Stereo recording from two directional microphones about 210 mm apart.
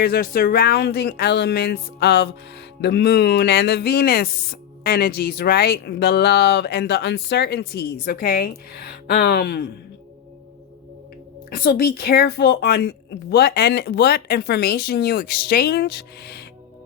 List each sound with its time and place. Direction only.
0.0 s speech: 45° left (ahead or behind)
11.5 s speech: 45° left (ahead or behind)